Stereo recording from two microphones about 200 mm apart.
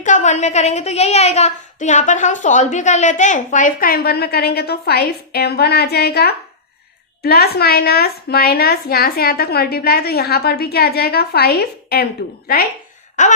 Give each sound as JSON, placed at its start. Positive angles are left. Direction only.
{"t": 0.0, "sound": "a woman's voice", "side_deg": 35}
{"t": 13.2, "sound": "a woman's voice", "side_deg": 35}